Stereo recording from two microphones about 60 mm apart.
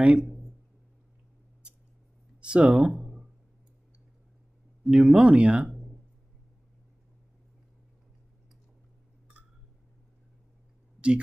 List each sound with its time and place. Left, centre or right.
0.0 s speech: right
2.4 s speech: centre
2.9 s a sound: centre
4.8 s speech: centre